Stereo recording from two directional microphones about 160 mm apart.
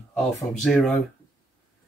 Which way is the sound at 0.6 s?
5° left (ahead or behind).